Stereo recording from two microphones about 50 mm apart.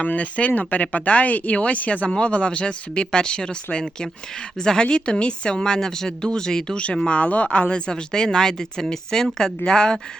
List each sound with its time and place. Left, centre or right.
0.0 s a woman's voice: left